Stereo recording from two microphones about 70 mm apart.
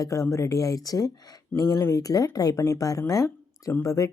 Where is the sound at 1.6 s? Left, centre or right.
Left.